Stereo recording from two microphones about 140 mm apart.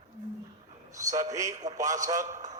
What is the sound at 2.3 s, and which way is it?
Speech, 60° right (ahead or behind).